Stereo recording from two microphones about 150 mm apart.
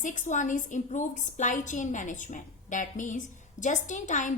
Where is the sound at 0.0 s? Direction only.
55° left (ahead or behind).